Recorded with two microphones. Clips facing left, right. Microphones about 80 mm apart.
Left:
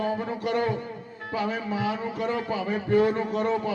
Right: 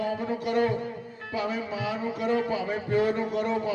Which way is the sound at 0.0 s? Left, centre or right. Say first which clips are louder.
Left 1 dB; left.